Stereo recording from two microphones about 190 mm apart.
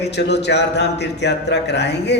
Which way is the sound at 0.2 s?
65° left (ahead or behind).